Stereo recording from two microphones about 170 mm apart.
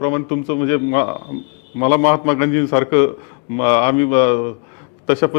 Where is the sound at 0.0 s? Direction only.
15° left (ahead or behind).